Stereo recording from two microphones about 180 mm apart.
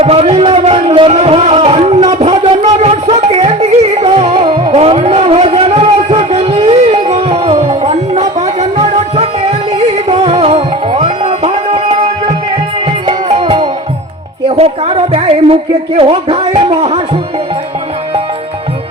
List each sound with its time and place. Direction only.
0.0 s music: 35° right (ahead or behind)
14.5 s a sound: 35° right (ahead or behind)
16.0 s speech: 35° right (ahead or behind)